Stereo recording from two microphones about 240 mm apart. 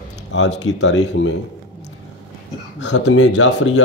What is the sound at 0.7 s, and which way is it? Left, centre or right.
Speech, left.